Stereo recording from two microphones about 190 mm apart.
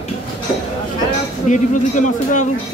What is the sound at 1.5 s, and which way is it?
Speech, 40° left (ahead or behind).